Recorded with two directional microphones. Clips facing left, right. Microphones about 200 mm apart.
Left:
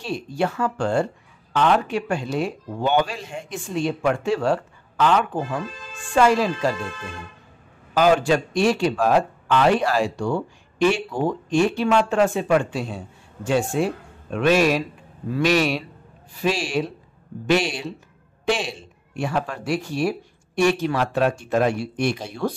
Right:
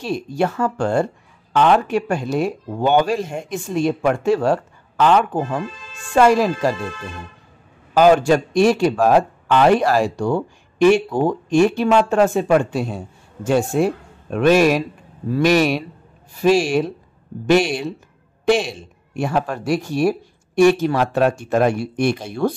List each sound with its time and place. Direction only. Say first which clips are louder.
0.0 s speech: right 4 dB; 45° right (ahead or behind)
7.9 s speech: right 5 dB; 45° right (ahead or behind)